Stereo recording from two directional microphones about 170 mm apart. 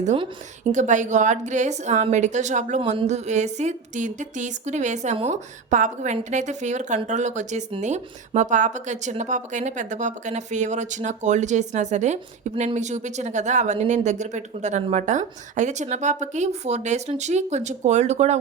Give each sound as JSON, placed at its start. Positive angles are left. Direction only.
{"t": 0.7, "sound": "a woman's voice", "side_deg": -45}